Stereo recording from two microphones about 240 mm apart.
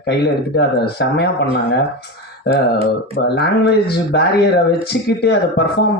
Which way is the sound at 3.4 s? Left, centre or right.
Left.